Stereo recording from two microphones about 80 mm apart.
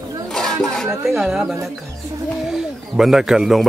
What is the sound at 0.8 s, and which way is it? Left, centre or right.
Speech, centre.